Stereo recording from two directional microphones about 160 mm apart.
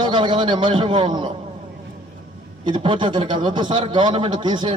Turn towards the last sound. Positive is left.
turn(degrees=-30)  # may be behind; listen again after turning